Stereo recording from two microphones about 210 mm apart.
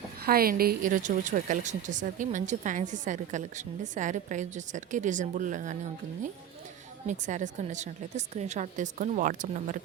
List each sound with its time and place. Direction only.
0.3 s a woman's voice: 45° right (ahead or behind)
7.1 s a woman's voice: 35° right (ahead or behind)